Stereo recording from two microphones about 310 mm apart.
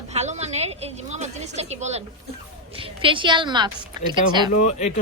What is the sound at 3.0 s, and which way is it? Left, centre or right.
A woman's voice, centre.